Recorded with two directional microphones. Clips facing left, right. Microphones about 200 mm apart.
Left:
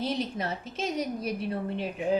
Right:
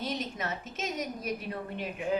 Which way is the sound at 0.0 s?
30° left (ahead or behind).